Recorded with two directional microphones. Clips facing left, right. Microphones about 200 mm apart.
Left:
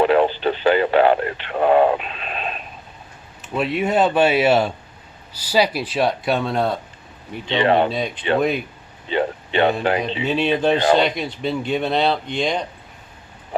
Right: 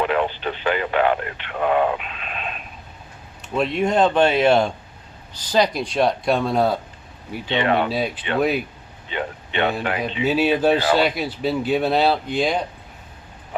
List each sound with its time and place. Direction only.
0.0 s radio: 35° left (ahead or behind)
3.4 s speech: 5° left (ahead or behind)
7.5 s speech: 30° left (ahead or behind)
7.9 s speech: 5° right (ahead or behind)
9.0 s a sound: 35° left (ahead or behind)
10.2 s speech: 5° right (ahead or behind)